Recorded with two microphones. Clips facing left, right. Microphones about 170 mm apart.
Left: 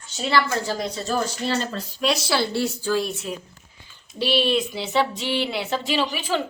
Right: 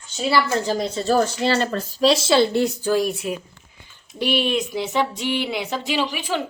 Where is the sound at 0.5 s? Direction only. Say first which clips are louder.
Right 4 dB; 20° right (ahead or behind).